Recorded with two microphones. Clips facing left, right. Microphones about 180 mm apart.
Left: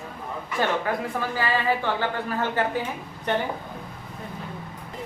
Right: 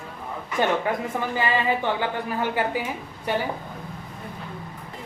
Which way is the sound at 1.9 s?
15° right (ahead or behind).